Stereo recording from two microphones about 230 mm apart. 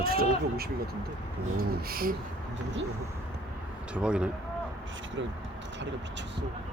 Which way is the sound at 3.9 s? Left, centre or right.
Centre.